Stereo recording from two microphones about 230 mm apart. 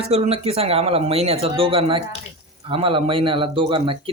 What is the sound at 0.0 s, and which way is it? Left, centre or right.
A man's voice, right.